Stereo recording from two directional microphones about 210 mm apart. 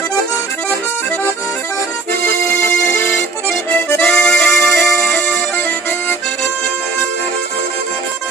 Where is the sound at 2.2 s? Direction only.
10° left (ahead or behind).